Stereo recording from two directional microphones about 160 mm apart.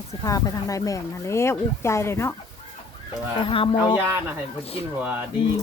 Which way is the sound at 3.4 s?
35° left (ahead or behind).